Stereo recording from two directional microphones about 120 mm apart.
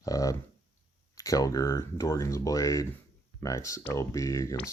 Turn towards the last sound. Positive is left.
turn(degrees=25)  # may be behind; listen again after turning